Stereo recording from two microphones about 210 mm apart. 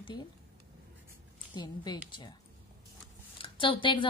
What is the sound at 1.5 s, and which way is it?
Speech, 20° left (ahead or behind).